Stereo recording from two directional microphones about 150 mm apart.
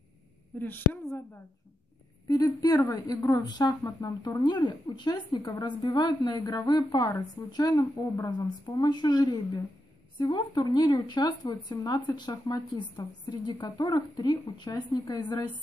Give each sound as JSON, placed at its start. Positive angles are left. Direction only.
{"t": 0.6, "sound": "a woman's voice", "side_deg": 15}
{"t": 2.2, "sound": "speech", "side_deg": 25}